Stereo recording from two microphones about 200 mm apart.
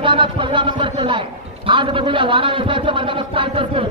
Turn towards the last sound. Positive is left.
turn(degrees=-25)  # may be behind; listen again after turning